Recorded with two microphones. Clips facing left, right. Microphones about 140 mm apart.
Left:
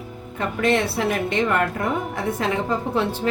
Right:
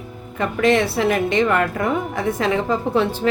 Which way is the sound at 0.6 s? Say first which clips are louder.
Right 4 dB; 90° right.